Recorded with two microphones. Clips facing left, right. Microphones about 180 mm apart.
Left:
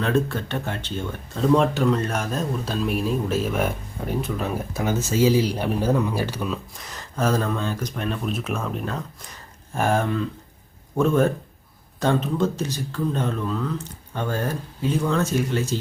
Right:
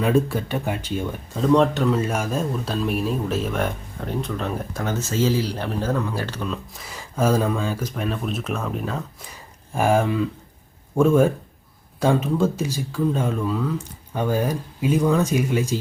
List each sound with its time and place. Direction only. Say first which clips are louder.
0.0 s speech: right 3 dB; 10° right (ahead or behind)
1.4 s speech: right 1 dB; centre (ahead or behind)
6.8 s speech: right 3 dB; 10° right (ahead or behind)